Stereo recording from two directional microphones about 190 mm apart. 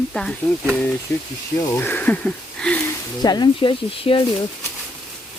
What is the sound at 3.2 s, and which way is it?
Speech, 20° left (ahead or behind).